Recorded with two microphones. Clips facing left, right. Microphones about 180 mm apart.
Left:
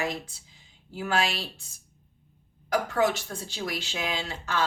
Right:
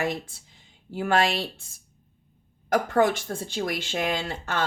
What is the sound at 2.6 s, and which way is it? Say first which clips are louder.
Speech: right 3 dB; 50° right (ahead or behind).